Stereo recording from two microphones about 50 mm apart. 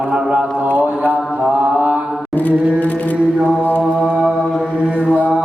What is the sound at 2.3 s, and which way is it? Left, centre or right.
Music, left.